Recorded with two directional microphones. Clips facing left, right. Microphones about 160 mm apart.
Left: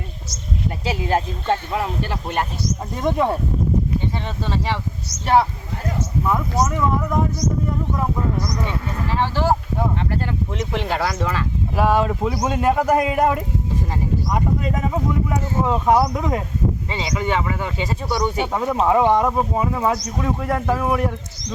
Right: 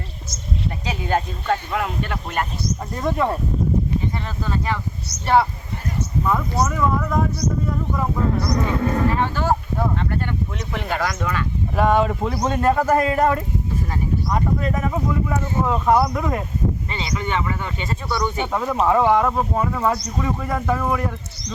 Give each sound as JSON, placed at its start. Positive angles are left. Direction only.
{"t": 0.9, "sound": "speech", "side_deg": 30}
{"t": 3.0, "sound": "speech", "side_deg": 20}
{"t": 4.4, "sound": "speech", "side_deg": 25}
{"t": 5.2, "sound": "speech", "side_deg": 10}
{"t": 8.4, "sound": "speech", "side_deg": -60}
{"t": 10.1, "sound": "speech", "side_deg": 25}
{"t": 11.8, "sound": "speech", "side_deg": 0}
{"t": 15.6, "sound": "speech", "side_deg": 5}
{"t": 16.0, "sound": "speech", "side_deg": 15}
{"t": 17.4, "sound": "speech", "side_deg": 15}